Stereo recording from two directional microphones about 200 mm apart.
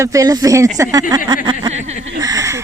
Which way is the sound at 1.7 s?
35° right (ahead or behind).